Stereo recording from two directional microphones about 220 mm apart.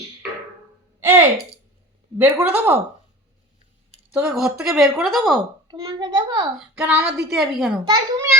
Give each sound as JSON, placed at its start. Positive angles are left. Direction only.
{"t": 0.9, "sound": "a sound", "side_deg": -10}
{"t": 2.1, "sound": "speech", "side_deg": -10}
{"t": 4.1, "sound": "speech", "side_deg": -5}
{"t": 5.6, "sound": "a child's voice", "side_deg": -20}
{"t": 6.7, "sound": "speech", "side_deg": -5}
{"t": 7.9, "sound": "speech", "side_deg": -15}